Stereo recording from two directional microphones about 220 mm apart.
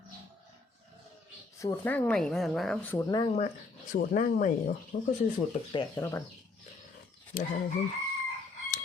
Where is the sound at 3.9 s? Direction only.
35° left (ahead or behind).